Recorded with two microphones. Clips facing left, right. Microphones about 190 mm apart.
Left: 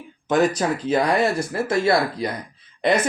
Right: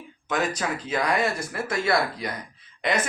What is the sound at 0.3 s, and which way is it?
Speech, 35° left (ahead or behind).